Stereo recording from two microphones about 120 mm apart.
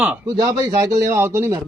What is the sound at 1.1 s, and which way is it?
Speech, 20° right (ahead or behind).